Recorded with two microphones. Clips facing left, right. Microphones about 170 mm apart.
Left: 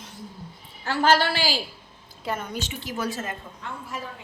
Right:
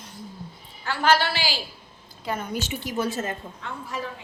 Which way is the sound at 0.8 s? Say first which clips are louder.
Left 1 dB; 40° left (ahead or behind).